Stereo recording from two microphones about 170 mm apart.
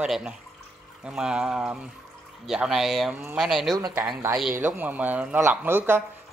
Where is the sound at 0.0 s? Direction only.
5° right (ahead or behind).